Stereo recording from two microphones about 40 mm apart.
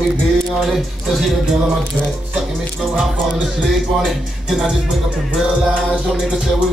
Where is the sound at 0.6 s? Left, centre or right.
Centre.